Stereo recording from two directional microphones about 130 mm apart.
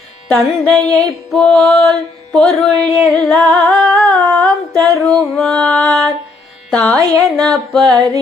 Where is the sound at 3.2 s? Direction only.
10° left (ahead or behind).